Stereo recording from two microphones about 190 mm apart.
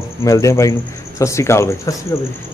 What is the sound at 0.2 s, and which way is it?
Speech, 15° left (ahead or behind).